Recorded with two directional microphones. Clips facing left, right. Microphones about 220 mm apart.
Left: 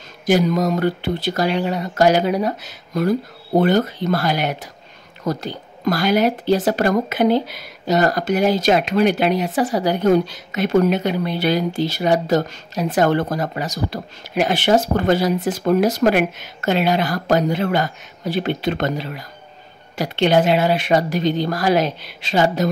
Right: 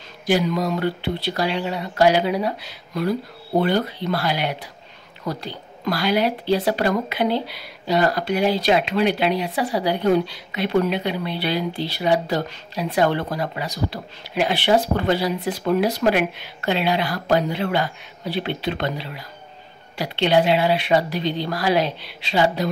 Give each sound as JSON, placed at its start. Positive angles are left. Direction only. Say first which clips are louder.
{"t": 0.3, "sound": "a woman's voice", "louder": "left 4 dB", "side_deg": 45}